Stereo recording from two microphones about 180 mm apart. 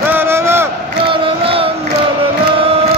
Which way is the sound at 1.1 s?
30° right (ahead or behind).